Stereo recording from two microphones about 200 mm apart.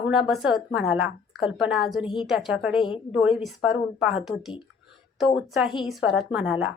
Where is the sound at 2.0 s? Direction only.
25° left (ahead or behind).